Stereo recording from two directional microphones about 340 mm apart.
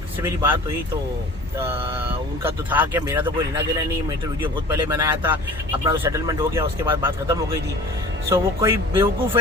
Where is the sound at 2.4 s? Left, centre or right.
Centre.